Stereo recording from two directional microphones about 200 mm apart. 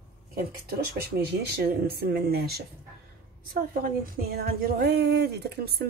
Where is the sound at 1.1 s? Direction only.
50° right (ahead or behind).